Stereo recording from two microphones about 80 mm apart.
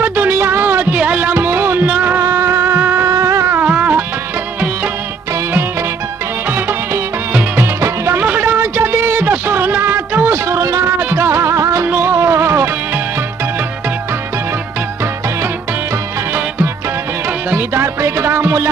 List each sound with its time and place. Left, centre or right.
0.0 s music: right
2.2 s music: right
3.1 s music: right
3.6 s music: centre
7.5 s music: right
8.2 s a sound: right
11.0 s music: right
16.3 s music: right